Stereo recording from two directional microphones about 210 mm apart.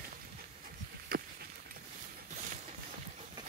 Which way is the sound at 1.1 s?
45° right (ahead or behind).